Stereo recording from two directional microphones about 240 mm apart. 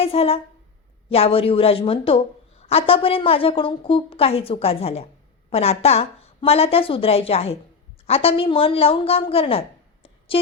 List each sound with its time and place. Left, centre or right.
0.0 s a woman's voice: left